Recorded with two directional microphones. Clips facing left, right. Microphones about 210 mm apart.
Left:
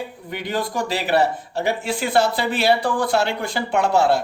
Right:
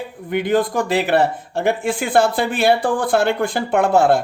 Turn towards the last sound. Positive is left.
turn(degrees=-50)  # may be behind; listen again after turning